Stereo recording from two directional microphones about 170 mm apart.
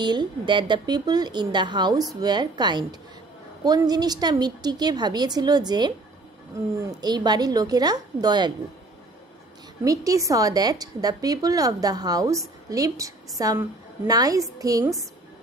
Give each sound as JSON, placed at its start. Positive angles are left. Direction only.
{"t": 0.0, "sound": "speech", "side_deg": -25}
{"t": 9.8, "sound": "speech", "side_deg": -20}